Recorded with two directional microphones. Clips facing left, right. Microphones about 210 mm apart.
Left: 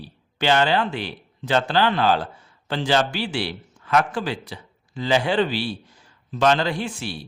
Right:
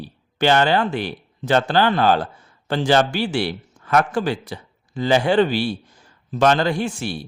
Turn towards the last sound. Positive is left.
turn(degrees=-45)  # may be behind; listen again after turning